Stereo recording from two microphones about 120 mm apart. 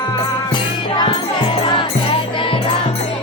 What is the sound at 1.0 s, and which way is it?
Music, 45° left (ahead or behind).